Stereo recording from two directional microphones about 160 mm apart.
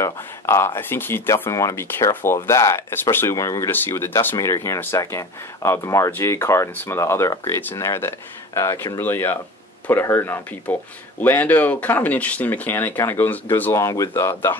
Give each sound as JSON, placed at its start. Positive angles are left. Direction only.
{"t": 0.0, "sound": "speech", "side_deg": 15}